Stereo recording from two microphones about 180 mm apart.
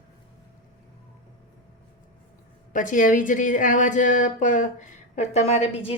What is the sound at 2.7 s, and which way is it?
A woman's voice, 45° left (ahead or behind).